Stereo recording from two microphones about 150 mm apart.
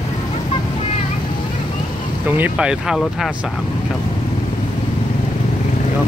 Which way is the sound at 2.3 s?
10° right (ahead or behind).